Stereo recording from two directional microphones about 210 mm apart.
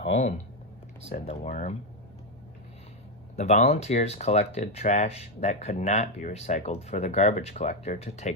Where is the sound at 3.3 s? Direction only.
35° left (ahead or behind).